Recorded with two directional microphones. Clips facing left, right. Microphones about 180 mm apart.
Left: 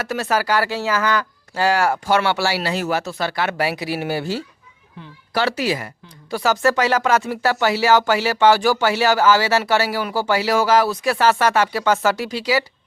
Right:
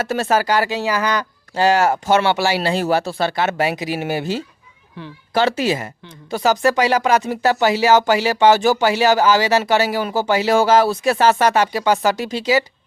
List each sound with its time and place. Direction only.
0.0 s speech: 25° right (ahead or behind)
2.6 s speech: 30° right (ahead or behind)